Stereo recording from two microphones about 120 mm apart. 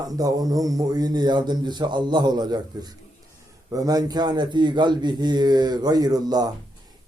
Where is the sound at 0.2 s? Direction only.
30° right (ahead or behind).